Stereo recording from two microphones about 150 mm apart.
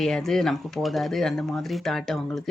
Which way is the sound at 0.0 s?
5° left (ahead or behind).